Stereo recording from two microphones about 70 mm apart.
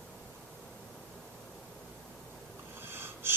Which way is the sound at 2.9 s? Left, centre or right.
Right.